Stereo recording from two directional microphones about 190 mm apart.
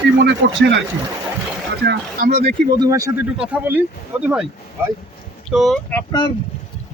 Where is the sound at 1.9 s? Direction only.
60° right (ahead or behind).